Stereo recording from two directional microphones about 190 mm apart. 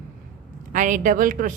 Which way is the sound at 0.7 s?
40° right (ahead or behind).